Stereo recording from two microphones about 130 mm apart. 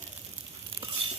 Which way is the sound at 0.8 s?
45° right (ahead or behind).